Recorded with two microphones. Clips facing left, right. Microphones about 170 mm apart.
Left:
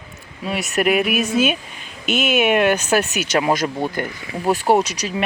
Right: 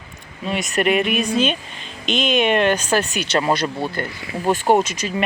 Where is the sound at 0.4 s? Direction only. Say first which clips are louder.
Even; 5° left (ahead or behind).